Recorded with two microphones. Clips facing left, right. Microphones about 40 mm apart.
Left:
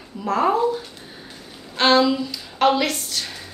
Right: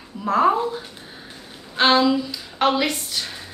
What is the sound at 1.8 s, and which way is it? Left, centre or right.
A woman's voice, centre.